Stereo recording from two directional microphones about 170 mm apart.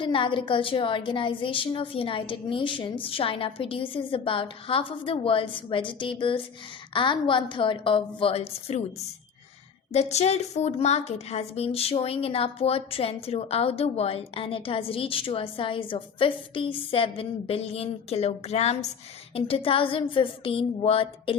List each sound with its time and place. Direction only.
0.0 s a woman's voice: 30° left (ahead or behind)
9.9 s a woman's voice: 40° left (ahead or behind)